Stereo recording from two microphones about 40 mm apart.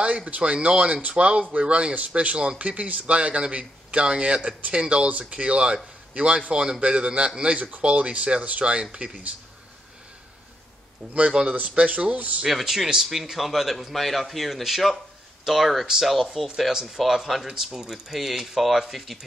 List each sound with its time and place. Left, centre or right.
0.0 s speech: right
7.5 s speech: right
7.8 s speech: right
11.4 s speech: centre
11.8 s speech: right
12.4 s a man's voice: centre